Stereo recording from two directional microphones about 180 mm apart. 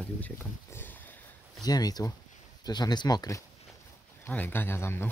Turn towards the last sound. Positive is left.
turn(degrees=15)  # may be behind; listen again after turning